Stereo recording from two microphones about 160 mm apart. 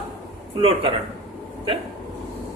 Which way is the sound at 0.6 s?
35° right (ahead or behind).